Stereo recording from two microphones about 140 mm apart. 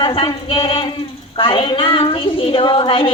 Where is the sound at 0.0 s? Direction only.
40° left (ahead or behind).